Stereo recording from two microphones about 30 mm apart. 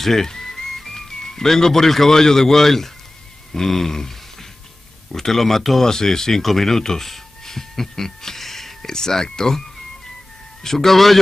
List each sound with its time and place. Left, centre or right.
0.0 s speech: centre
5.9 s speech: centre
7.1 s a sound: centre
8.9 s speech: left
10.6 s speech: centre